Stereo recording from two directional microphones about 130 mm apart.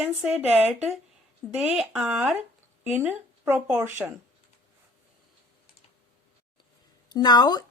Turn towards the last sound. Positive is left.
turn(degrees=30)  # may be behind; listen again after turning